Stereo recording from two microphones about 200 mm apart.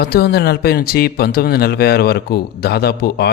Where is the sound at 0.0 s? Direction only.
50° left (ahead or behind).